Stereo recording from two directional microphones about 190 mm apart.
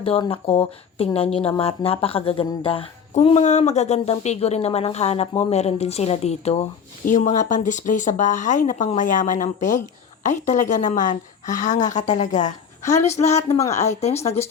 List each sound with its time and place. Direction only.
0.0 s speech: 30° left (ahead or behind)